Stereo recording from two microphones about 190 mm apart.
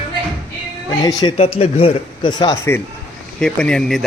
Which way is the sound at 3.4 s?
5° left (ahead or behind).